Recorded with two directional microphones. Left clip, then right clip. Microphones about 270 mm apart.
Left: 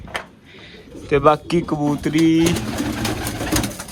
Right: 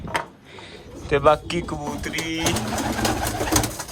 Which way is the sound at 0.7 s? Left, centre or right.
Centre.